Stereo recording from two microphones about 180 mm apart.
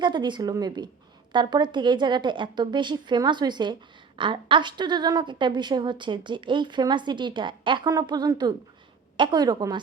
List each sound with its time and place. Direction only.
0.0 s a woman's voice: 25° right (ahead or behind)